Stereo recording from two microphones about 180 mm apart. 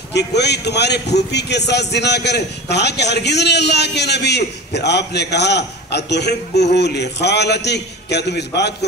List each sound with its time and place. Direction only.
0.1 s a man's voice: 70° left (ahead or behind)